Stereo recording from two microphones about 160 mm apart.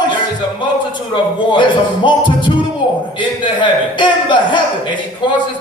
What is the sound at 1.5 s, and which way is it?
A man's voice, 30° left (ahead or behind).